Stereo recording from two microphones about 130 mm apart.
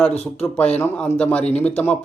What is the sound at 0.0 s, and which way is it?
Speech, 15° left (ahead or behind).